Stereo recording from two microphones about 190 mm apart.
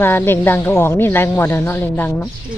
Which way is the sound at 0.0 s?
10° left (ahead or behind).